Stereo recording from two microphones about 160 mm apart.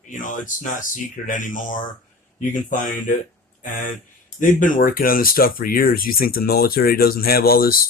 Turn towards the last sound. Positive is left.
turn(degrees=65)  # may be behind; listen again after turning